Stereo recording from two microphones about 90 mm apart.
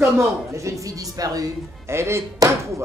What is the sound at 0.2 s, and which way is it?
Speech, 35° right (ahead or behind).